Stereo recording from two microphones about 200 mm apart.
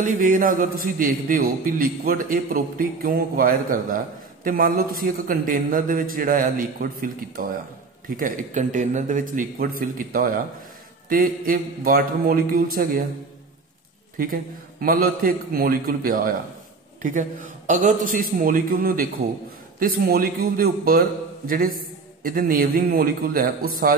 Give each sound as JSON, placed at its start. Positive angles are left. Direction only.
{"t": 0.0, "sound": "a man's voice", "side_deg": -45}
{"t": 14.1, "sound": "a man's voice", "side_deg": -45}